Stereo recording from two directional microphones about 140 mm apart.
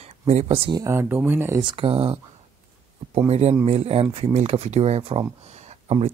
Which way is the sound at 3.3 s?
50° right (ahead or behind).